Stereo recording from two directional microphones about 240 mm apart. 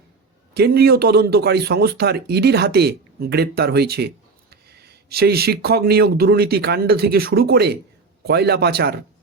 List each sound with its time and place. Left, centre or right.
0.5 s speech: right